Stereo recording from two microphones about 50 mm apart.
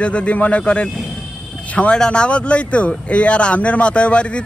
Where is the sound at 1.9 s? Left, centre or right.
Centre.